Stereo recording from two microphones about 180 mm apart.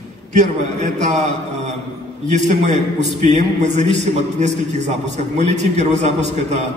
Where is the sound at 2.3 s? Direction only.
40° right (ahead or behind).